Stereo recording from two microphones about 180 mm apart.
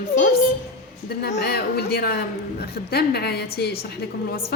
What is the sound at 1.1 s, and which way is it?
A woman's voice, 65° left (ahead or behind).